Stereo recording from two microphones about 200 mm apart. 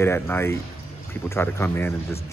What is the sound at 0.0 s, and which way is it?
A man's voice, 10° left (ahead or behind).